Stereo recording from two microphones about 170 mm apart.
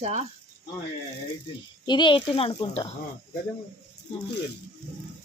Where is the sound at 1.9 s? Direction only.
25° left (ahead or behind).